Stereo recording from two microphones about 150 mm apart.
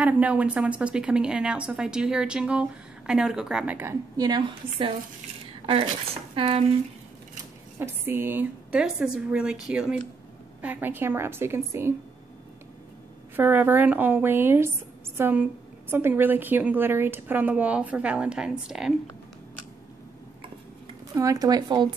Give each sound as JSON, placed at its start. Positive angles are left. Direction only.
{"t": 0.0, "sound": "a woman's voice", "side_deg": -10}
{"t": 4.2, "sound": "a woman's voice", "side_deg": -30}
{"t": 6.3, "sound": "speech", "side_deg": -35}
{"t": 7.8, "sound": "speech", "side_deg": -15}
{"t": 13.4, "sound": "speech", "side_deg": -10}
{"t": 21.1, "sound": "a woman's voice", "side_deg": -25}